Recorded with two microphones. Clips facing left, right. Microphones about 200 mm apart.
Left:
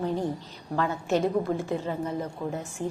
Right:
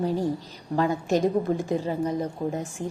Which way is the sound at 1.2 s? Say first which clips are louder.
Right 2 dB; 15° right (ahead or behind).